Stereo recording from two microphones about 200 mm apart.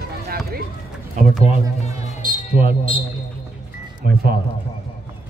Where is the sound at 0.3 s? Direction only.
50° right (ahead or behind).